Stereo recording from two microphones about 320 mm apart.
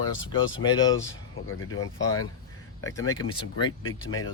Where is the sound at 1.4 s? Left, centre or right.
Left.